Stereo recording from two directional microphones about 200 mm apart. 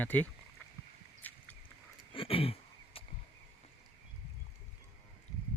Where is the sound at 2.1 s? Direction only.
25° left (ahead or behind).